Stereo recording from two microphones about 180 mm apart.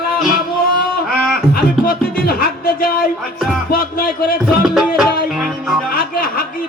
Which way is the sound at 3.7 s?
55° left (ahead or behind).